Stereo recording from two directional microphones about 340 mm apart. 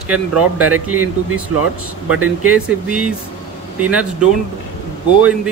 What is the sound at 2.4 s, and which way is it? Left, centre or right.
Speech, centre.